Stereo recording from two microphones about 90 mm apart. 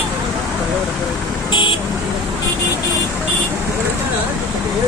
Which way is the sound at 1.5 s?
65° left (ahead or behind).